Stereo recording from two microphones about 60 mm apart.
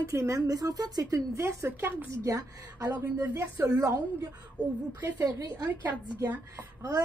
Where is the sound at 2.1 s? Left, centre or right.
Right.